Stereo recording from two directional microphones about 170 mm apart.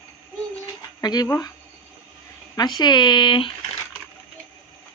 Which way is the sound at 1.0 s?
25° left (ahead or behind).